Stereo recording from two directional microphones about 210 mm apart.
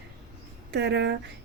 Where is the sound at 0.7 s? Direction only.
55° right (ahead or behind).